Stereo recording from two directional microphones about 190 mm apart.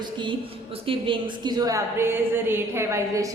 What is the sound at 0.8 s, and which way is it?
A woman's voice, 30° right (ahead or behind).